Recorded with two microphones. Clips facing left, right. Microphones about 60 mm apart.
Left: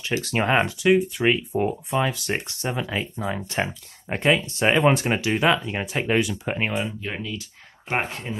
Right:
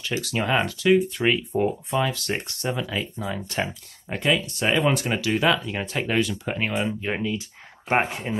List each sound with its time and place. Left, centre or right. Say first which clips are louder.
0.0 s speech: left 2 dB; left
6.9 s speech: right 5 dB; centre